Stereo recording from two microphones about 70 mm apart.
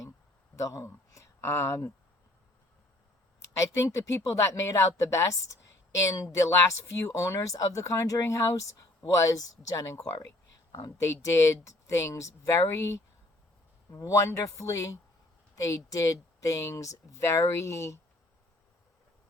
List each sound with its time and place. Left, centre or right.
0.5 s speech: left
3.6 s speech: left
11.0 s speech: left